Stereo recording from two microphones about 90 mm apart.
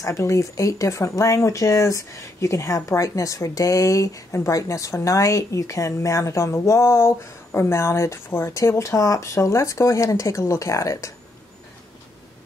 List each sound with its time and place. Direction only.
0.0 s speech: 35° left (ahead or behind)